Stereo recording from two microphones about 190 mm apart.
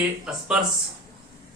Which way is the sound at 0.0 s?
5° right (ahead or behind).